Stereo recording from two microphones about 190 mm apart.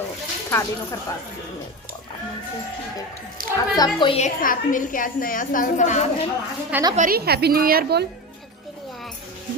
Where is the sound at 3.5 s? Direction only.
20° left (ahead or behind); by 6.0 s 40° left (ahead or behind).